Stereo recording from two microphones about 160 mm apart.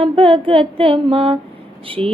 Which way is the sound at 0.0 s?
35° right (ahead or behind).